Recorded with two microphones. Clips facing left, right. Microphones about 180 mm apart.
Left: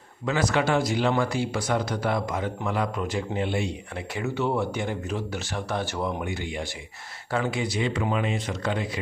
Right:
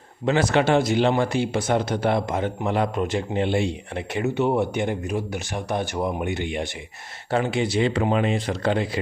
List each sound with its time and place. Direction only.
0.3 s speech: 25° right (ahead or behind)